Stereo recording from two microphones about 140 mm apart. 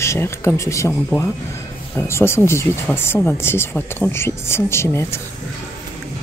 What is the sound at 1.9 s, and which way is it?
Speech, 20° left (ahead or behind).